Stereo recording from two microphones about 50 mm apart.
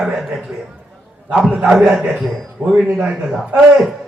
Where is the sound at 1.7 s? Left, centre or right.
Centre.